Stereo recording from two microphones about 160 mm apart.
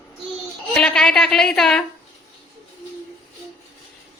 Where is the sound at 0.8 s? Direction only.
5° left (ahead or behind).